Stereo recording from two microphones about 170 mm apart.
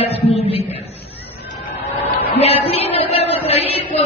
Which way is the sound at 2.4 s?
35° left (ahead or behind).